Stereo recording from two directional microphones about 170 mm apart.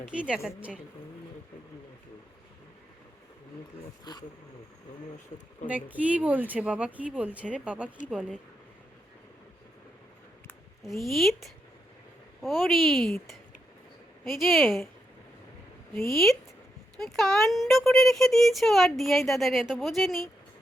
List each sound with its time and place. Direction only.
0.0 s speech: 5° right (ahead or behind)
4.1 s speech: 25° left (ahead or behind)
5.6 s speech: 10° right (ahead or behind)
10.8 s speech: centre (ahead or behind)
16.0 s speech: centre (ahead or behind)